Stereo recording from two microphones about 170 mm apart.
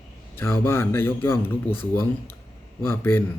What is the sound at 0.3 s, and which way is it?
A man's voice, 15° left (ahead or behind).